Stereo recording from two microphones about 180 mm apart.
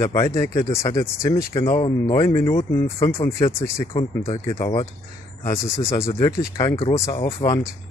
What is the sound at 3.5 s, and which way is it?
Speech, 15° left (ahead or behind).